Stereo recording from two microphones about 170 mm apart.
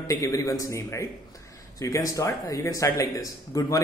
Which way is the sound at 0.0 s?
20° left (ahead or behind).